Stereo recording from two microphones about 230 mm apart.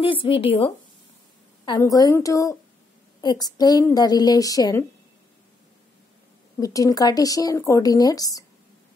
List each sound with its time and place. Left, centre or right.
0.0 s speech: left
1.7 s speech: centre
6.6 s speech: centre